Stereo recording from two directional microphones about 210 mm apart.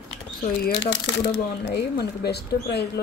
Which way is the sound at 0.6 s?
55° left (ahead or behind).